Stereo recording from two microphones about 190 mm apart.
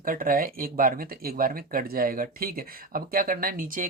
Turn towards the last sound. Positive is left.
turn(degrees=-45)  # may be behind; listen again after turning